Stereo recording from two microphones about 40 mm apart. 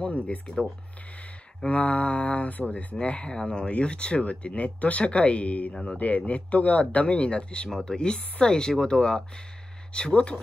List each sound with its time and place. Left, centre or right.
0.0 s speech: left
1.7 s speech: left
3.0 s speech: left